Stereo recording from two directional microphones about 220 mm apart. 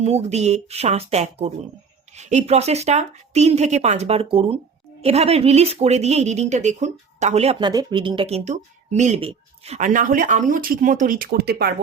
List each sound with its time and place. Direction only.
0.0 s speech: 30° right (ahead or behind); by 11.7 s 45° right (ahead or behind)